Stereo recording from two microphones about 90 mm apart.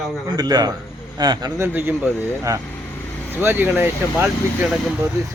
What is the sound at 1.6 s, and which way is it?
Speech, 25° right (ahead or behind).